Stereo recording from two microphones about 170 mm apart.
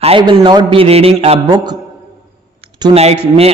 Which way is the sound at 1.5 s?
25° right (ahead or behind).